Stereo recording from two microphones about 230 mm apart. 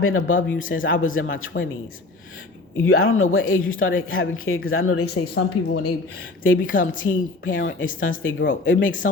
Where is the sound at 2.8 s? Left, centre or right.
Left.